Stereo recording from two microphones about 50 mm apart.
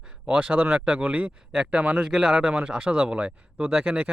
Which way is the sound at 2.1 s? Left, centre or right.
Centre.